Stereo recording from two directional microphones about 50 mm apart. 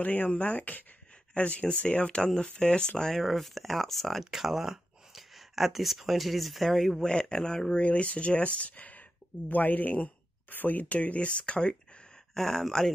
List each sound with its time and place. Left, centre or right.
0.0 s speech: left; by 2.9 s centre
3.0 s speech: centre
4.2 s speech: centre
7.0 s speech: centre
12.4 s speech: centre